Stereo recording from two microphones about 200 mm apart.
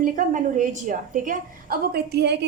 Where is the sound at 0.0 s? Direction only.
40° right (ahead or behind).